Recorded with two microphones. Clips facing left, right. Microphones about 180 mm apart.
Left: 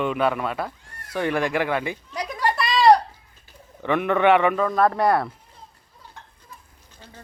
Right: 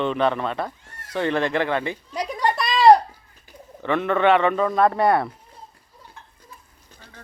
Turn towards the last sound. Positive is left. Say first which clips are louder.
# right 1 dB
turn(degrees=0)  # may be behind; listen again after turning